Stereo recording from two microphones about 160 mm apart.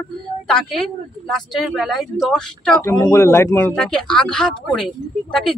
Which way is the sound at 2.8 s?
20° left (ahead or behind).